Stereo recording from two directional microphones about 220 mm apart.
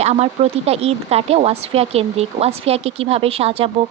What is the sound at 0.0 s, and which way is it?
A woman's voice, 30° right (ahead or behind).